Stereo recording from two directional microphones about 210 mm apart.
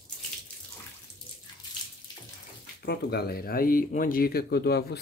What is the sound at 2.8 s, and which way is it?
Speech, 50° left (ahead or behind).